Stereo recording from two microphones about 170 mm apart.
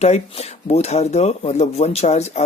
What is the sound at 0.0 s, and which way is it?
Speech, 40° left (ahead or behind).